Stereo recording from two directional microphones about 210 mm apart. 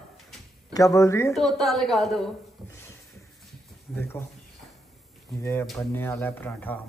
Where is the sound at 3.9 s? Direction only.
10° left (ahead or behind).